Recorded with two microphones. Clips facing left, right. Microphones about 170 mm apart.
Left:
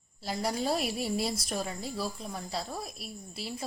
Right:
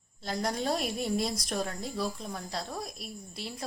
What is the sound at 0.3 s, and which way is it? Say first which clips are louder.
Speech: even; 5° left (ahead or behind).